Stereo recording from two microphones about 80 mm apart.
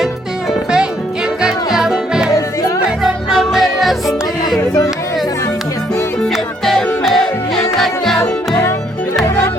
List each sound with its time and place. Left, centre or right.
1.4 s music: centre
6.2 s music: centre
8.2 s music: left